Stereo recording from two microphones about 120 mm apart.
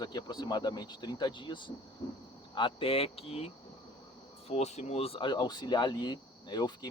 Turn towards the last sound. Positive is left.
turn(degrees=35)  # may be behind; listen again after turning